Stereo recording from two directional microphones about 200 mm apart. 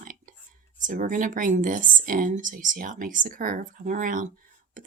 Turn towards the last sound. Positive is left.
turn(degrees=-40)  # may be behind; listen again after turning